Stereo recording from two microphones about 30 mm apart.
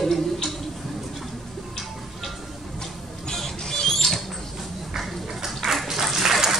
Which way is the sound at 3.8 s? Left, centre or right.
Centre.